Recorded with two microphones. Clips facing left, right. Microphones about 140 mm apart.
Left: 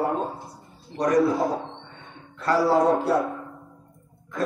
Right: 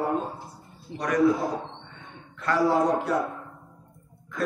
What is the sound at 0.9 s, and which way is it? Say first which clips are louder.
Speech: left 6 dB; 35° left (ahead or behind).